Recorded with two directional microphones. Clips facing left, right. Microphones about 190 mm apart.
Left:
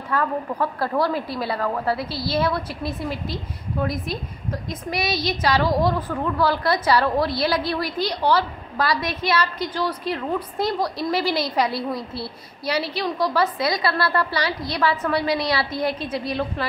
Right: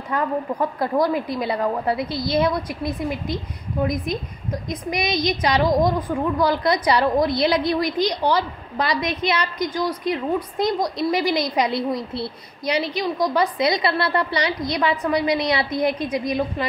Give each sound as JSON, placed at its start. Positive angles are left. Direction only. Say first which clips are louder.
{"t": 0.1, "sound": "a woman's voice", "louder": "right 1 dB", "side_deg": -15}